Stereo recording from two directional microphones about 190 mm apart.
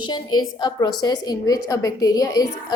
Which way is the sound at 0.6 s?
20° left (ahead or behind).